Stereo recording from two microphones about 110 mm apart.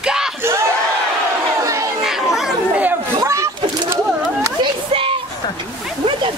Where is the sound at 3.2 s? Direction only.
25° right (ahead or behind).